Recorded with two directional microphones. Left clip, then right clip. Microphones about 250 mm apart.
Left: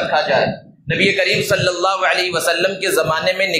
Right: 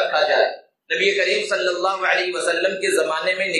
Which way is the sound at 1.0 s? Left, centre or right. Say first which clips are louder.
Left 4 dB; left.